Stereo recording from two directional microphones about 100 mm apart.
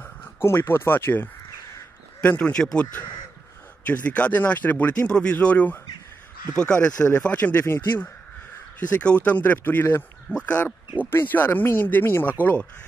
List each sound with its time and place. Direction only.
0.0 s speech: 20° left (ahead or behind)